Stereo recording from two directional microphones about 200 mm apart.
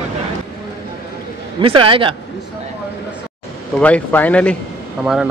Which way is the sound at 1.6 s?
25° right (ahead or behind).